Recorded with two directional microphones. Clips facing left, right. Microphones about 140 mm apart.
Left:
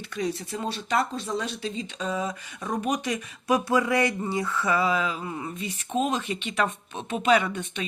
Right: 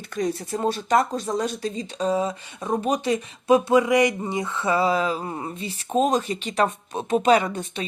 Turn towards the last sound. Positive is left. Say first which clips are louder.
# right 2 dB
turn(degrees=-35)  # may be behind; listen again after turning